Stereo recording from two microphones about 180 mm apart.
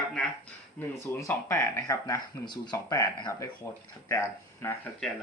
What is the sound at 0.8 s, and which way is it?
Speech, 15° left (ahead or behind).